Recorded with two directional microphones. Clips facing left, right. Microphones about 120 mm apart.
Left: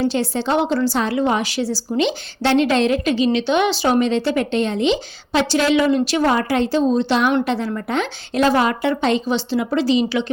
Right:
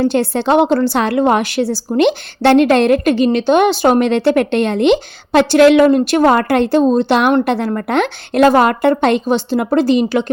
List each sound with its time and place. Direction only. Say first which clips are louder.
0.0 s a woman's voice: right 5 dB; 55° right (ahead or behind)